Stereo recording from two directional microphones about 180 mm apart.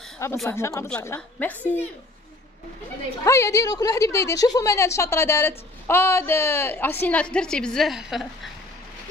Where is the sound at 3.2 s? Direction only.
15° left (ahead or behind).